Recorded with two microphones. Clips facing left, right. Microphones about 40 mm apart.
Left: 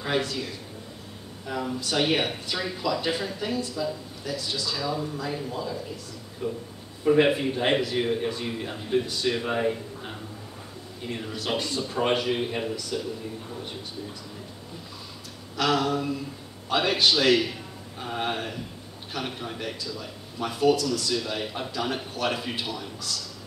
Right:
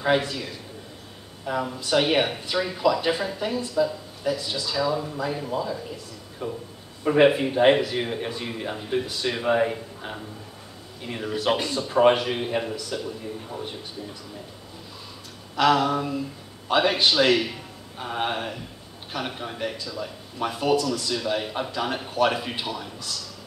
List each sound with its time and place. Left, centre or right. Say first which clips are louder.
0.0 s speech: right 5 dB; centre
1.4 s a man's voice: right 2 dB; centre
15.5 s a man's voice: right 4 dB; centre